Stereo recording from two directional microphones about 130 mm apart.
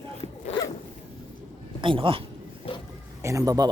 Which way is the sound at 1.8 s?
40° right (ahead or behind).